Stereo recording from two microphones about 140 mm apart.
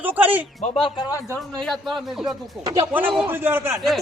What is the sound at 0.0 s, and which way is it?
Speech, 10° right (ahead or behind).